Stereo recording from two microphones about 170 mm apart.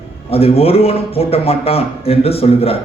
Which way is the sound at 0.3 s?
35° left (ahead or behind).